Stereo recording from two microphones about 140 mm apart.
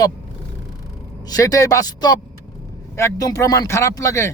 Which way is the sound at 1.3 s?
25° left (ahead or behind).